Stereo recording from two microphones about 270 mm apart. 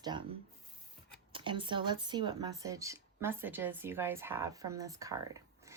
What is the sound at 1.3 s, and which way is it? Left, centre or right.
Speech, centre.